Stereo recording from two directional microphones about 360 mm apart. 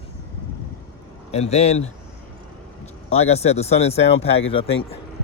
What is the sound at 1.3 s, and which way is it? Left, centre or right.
Speech, centre.